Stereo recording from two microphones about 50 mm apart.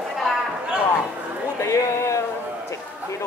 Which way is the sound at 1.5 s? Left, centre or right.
Left.